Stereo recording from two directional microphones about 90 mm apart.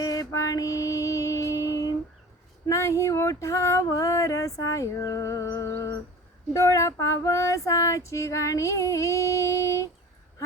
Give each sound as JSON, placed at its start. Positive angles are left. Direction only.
{"t": 0.0, "sound": "music", "side_deg": 40}
{"t": 2.6, "sound": "child singing", "side_deg": 35}
{"t": 5.5, "sound": "a sound", "side_deg": 25}
{"t": 6.5, "sound": "child singing", "side_deg": 35}